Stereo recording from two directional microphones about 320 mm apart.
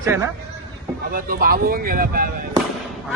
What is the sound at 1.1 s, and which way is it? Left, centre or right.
Speech, right.